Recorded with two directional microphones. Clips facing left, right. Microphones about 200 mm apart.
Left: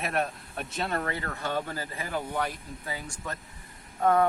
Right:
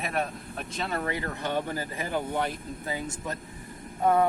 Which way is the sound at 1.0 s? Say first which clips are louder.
Right 2 dB; 15° right (ahead or behind).